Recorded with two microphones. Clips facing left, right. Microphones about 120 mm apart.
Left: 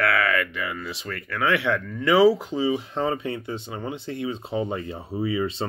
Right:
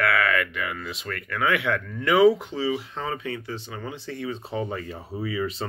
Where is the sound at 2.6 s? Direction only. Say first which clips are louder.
Left 3 dB; 25° left (ahead or behind).